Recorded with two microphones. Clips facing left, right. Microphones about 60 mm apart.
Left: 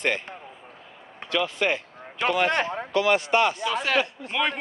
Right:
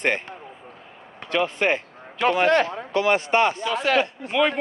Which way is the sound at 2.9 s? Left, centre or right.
Right.